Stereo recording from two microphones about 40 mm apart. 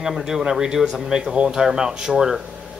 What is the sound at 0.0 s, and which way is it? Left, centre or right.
Speech, centre.